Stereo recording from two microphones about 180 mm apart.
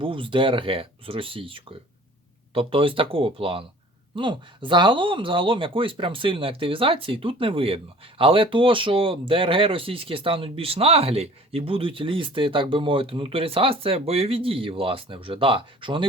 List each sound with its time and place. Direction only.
0.0 s speech: 30° right (ahead or behind)